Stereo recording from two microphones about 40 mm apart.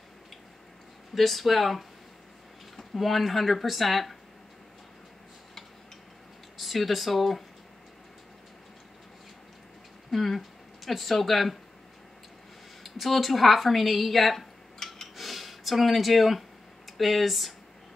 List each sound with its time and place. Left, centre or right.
1.1 s speech: centre
6.6 s speech: centre
10.1 s speech: centre
12.8 s speech: centre
14.8 s a sound: centre